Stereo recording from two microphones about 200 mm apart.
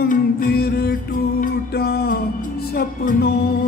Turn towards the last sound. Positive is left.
turn(degrees=50)  # may be behind; listen again after turning